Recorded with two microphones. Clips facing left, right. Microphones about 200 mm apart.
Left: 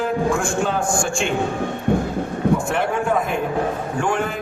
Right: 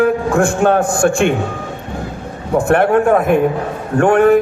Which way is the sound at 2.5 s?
60° right (ahead or behind).